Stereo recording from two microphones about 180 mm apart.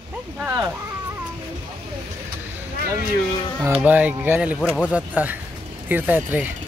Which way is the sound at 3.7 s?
10° right (ahead or behind).